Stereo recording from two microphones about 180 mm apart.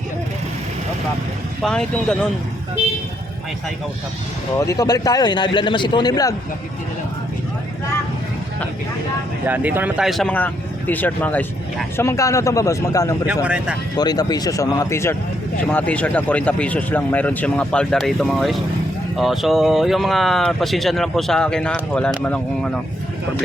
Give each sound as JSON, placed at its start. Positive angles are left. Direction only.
{"t": 1.6, "sound": "speech", "side_deg": 5}
{"t": 4.5, "sound": "a man's voice", "side_deg": 15}
{"t": 9.5, "sound": "speech", "side_deg": -10}
{"t": 13.2, "sound": "speech", "side_deg": -5}
{"t": 13.9, "sound": "a man's voice", "side_deg": 20}